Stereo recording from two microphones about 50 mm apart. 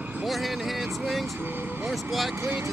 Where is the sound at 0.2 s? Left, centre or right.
Centre.